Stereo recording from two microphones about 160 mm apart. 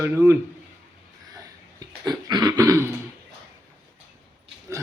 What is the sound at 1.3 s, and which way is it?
Throat clearing, 25° right (ahead or behind).